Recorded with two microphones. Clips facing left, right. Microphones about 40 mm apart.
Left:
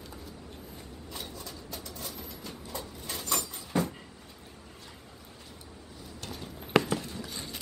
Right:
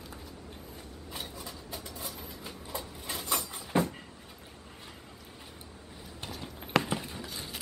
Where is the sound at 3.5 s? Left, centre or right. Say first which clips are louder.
Right 4 dB; centre.